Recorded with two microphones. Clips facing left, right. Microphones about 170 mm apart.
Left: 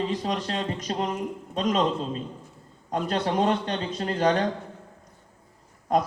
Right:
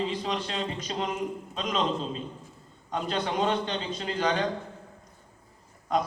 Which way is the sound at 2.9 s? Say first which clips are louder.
Left 4 dB; 45° left (ahead or behind).